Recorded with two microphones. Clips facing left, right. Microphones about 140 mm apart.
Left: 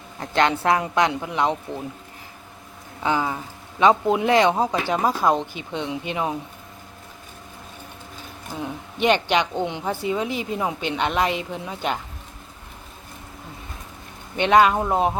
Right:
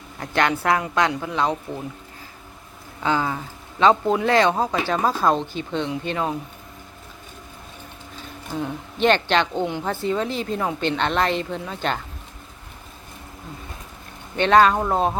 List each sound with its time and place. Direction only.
0.2 s a woman's voice: 20° left (ahead or behind)
3.0 s a woman's voice: 15° left (ahead or behind)
8.5 s a woman's voice: 10° left (ahead or behind)
14.3 s a woman's voice: 15° left (ahead or behind)